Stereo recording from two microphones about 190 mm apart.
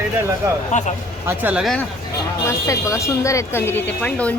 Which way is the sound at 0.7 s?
40° left (ahead or behind).